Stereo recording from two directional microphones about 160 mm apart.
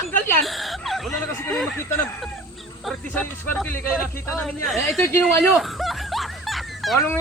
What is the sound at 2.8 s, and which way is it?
Speech, 10° left (ahead or behind).